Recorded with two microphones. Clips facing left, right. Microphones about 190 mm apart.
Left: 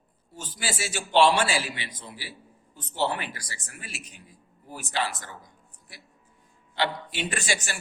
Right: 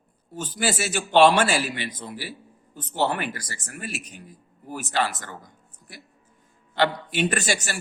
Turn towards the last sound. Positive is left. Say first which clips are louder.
# right 6 dB
turn(degrees=-40)  # may be behind; listen again after turning